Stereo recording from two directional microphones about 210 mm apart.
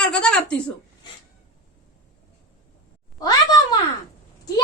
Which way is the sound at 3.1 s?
20° left (ahead or behind).